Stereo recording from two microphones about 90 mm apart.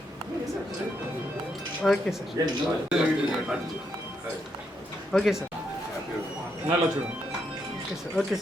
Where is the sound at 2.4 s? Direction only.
40° right (ahead or behind).